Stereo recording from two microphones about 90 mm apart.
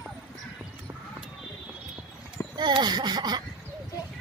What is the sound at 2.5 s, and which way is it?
Speech, 55° right (ahead or behind).